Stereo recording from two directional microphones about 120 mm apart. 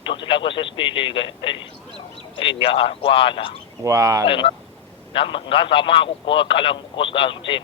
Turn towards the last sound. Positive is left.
turn(degrees=45)  # may be behind; listen again after turning